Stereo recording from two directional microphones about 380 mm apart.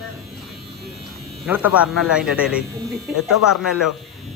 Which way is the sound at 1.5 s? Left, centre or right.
Centre.